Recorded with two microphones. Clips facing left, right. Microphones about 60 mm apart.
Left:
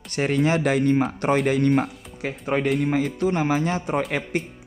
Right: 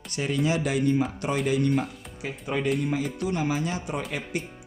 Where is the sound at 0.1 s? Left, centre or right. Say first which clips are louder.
Left 5 dB; left.